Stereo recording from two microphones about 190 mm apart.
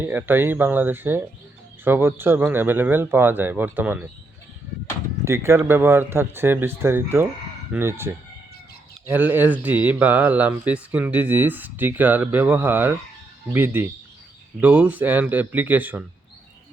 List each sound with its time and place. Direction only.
0.0 s speech: 10° right (ahead or behind)
5.2 s speech: 15° right (ahead or behind)